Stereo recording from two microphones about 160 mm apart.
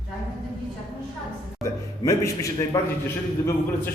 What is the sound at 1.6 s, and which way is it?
A man's voice, 20° left (ahead or behind).